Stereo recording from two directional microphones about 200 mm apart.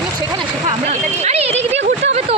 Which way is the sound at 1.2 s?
30° right (ahead or behind).